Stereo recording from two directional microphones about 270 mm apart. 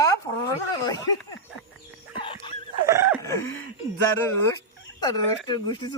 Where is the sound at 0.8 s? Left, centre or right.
Centre.